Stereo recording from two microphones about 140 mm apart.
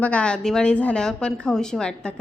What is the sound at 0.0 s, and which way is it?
A woman's voice, 10° left (ahead or behind).